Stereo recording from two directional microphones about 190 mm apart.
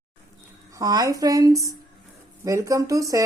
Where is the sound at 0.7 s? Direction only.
20° right (ahead or behind).